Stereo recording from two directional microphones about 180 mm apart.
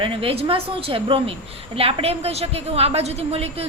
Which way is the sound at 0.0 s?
30° right (ahead or behind).